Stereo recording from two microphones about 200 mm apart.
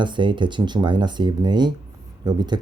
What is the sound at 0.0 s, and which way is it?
Speech, 25° right (ahead or behind).